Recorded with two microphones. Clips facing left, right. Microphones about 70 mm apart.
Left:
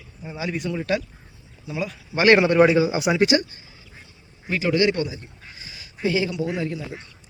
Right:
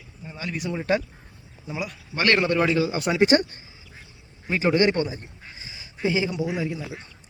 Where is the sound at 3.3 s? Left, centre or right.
Right.